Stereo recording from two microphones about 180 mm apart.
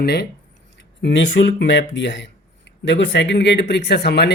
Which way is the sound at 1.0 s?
80° left.